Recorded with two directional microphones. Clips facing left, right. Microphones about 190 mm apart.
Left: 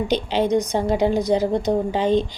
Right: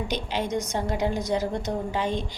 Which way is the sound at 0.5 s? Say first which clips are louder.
Left 8 dB; 20° left (ahead or behind).